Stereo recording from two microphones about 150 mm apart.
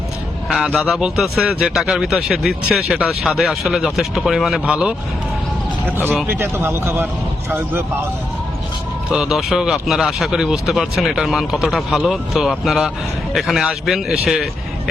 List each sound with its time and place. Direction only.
0.4 s speech: centre (ahead or behind)
6.2 s speech: 15° right (ahead or behind)
9.0 s speech: 5° right (ahead or behind)